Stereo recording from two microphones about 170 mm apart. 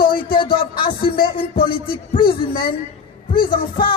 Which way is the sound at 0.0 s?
60° left (ahead or behind).